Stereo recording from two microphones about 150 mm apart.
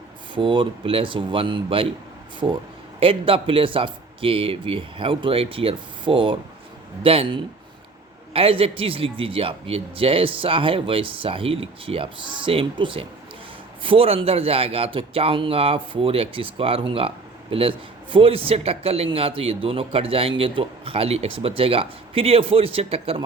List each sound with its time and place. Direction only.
0.3 s a man's voice: 35° right (ahead or behind)
3.0 s a man's voice: 35° right (ahead or behind)